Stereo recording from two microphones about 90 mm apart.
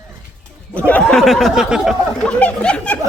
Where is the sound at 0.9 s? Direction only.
10° left (ahead or behind); by 1.9 s 10° right (ahead or behind).